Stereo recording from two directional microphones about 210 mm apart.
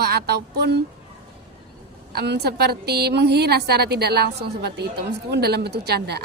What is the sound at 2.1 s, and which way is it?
A woman's voice, 50° right (ahead or behind).